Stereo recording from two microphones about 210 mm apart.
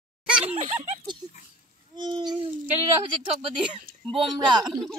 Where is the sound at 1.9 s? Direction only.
20° right (ahead or behind).